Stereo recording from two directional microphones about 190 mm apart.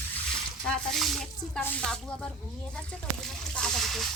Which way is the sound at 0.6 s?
Centre (ahead or behind).